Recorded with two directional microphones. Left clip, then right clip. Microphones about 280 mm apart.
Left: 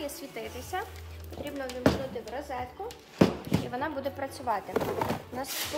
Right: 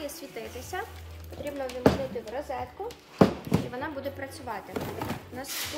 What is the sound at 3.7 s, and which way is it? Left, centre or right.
Speech, centre.